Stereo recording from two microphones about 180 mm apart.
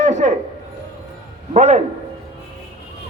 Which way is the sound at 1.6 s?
40° right (ahead or behind).